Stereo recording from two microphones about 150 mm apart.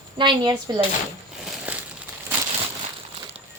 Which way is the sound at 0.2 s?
30° right (ahead or behind).